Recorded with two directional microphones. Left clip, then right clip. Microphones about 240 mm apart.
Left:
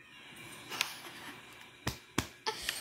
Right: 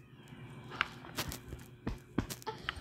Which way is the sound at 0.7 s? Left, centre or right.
Left.